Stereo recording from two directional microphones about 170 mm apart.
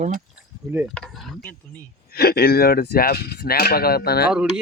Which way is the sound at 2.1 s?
65° left (ahead or behind).